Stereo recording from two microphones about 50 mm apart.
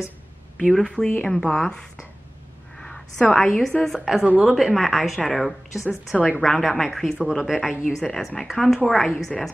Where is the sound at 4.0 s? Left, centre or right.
Centre.